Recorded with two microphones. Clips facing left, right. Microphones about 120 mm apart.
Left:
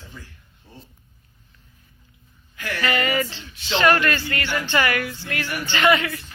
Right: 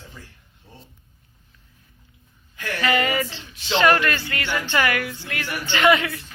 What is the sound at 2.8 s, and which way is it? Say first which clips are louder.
Speech: right 1 dB; 15° right (ahead or behind).